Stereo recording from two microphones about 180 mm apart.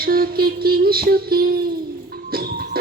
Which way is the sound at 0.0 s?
55° right (ahead or behind).